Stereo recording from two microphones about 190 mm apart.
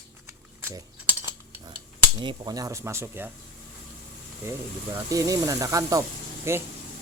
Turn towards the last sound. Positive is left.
turn(degrees=-15)  # may be behind; listen again after turning